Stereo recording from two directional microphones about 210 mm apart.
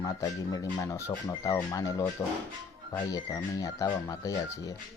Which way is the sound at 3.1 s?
15° left (ahead or behind).